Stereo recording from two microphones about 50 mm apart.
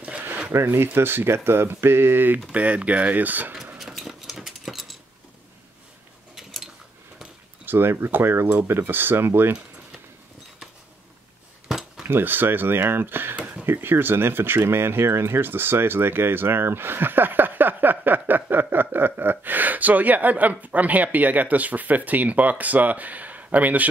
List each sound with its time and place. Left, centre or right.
0.7 s speech: right
2.5 s speech: right
3.7 s a sound: centre
6.3 s a sound: centre
7.6 s speech: right
12.1 s speech: right